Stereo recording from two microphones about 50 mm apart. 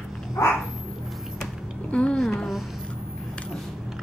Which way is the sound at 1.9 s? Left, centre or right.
Left.